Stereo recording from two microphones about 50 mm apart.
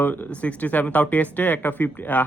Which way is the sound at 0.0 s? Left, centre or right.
Left.